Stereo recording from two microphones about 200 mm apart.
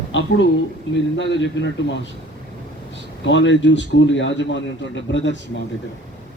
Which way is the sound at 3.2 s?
65° left (ahead or behind).